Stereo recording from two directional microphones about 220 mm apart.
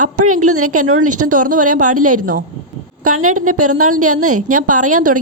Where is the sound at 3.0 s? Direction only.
80° right.